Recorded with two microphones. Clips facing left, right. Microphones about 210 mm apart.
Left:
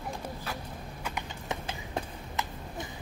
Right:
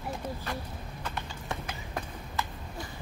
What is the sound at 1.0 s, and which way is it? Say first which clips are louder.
Clip-clop: even; 15° left (ahead or behind).